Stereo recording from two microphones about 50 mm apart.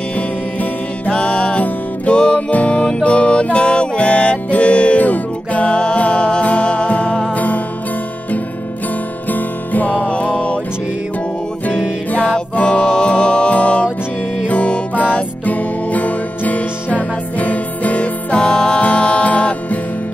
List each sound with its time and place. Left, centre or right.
1.1 s music: left
7.3 s music: left
9.3 s music: left
12.1 s music: left